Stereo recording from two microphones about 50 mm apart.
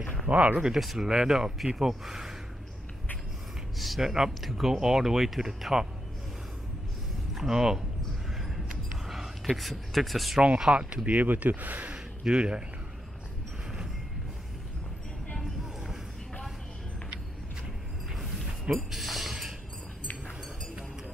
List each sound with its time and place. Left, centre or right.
0.3 s speech: right
0.6 s speech: centre
3.7 s speech: centre
7.3 s speech: centre
8.4 s a sound: centre
9.5 s speech: centre
10.7 s speech: right
11.1 s speech: right
11.9 s a sound: right
18.1 s a sound: centre
18.8 s speech: centre